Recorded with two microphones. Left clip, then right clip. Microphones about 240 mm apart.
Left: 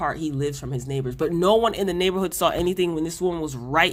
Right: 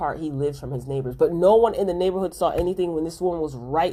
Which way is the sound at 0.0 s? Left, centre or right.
Left.